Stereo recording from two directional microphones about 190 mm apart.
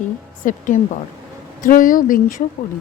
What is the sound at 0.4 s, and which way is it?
Speech, 45° left (ahead or behind).